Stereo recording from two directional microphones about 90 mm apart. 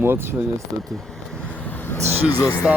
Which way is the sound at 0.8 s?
5° left (ahead or behind).